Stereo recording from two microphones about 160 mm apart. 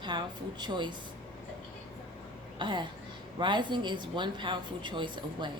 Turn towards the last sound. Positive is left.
turn(degrees=-30)  # may be behind; listen again after turning